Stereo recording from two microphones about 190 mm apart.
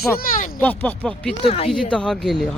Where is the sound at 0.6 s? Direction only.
10° left (ahead or behind).